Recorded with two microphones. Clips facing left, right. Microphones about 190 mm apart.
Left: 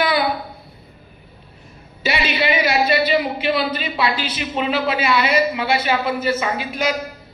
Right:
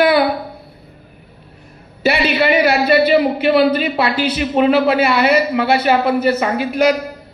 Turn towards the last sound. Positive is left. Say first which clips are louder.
# right 7 dB
turn(degrees=-65)  # may be behind; listen again after turning